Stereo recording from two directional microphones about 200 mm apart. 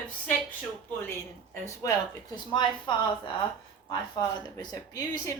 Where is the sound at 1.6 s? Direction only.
15° left (ahead or behind).